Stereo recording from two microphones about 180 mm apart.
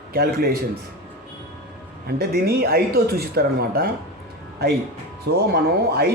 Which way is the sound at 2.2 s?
60° right (ahead or behind).